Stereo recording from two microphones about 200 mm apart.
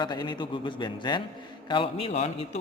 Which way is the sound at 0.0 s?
20° left (ahead or behind).